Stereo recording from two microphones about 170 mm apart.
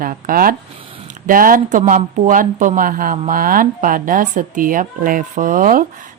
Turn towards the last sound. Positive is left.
turn(degrees=-50)  # may be behind; listen again after turning